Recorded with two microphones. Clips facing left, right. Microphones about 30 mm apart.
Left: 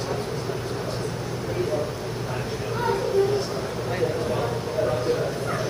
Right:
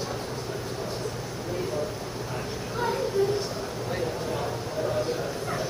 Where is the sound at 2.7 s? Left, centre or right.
Centre.